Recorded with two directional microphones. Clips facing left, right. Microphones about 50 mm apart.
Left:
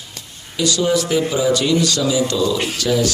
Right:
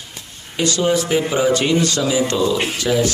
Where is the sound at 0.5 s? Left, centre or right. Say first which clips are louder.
Even; right.